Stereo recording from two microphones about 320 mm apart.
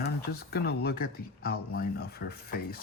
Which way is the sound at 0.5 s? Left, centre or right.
Left.